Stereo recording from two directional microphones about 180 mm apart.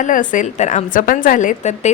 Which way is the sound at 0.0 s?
45° left (ahead or behind).